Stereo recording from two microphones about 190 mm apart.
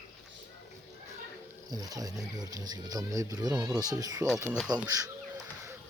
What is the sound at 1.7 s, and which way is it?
Speech, 20° right (ahead or behind).